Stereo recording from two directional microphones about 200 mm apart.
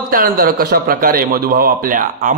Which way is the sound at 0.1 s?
45° right (ahead or behind).